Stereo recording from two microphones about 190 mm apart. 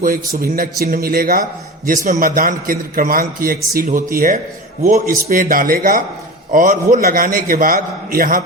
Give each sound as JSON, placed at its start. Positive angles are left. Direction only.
{"t": 0.0, "sound": "a man's voice", "side_deg": -50}